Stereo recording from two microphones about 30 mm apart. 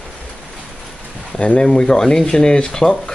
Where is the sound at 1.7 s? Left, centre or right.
Left.